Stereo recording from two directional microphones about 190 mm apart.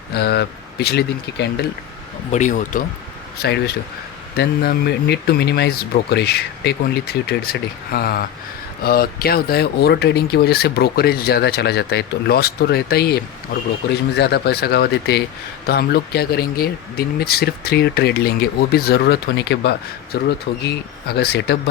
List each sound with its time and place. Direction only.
0.1 s speech: 55° left (ahead or behind)
2.3 s speech: 40° left (ahead or behind)
3.3 s speech: 55° left (ahead or behind)